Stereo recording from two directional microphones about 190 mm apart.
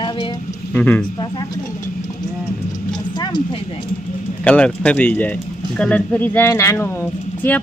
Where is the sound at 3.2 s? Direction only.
20° left (ahead or behind).